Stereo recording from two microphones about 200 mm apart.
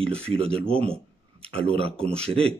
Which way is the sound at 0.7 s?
5° left (ahead or behind).